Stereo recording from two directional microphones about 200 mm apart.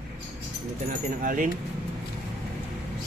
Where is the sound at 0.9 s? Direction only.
45° right (ahead or behind).